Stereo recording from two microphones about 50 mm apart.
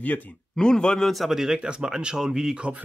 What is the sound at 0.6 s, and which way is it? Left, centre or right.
Speech, centre.